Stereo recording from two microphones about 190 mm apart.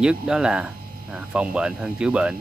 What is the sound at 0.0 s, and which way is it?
Speech, 5° right (ahead or behind).